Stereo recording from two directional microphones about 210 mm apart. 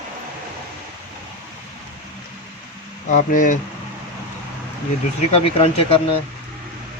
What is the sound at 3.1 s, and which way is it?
Speech, 40° left (ahead or behind).